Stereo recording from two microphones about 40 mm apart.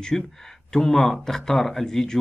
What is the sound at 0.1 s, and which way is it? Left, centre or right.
Speech, centre.